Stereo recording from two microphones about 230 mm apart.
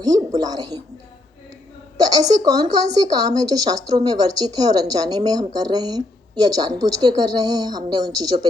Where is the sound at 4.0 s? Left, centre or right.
Centre.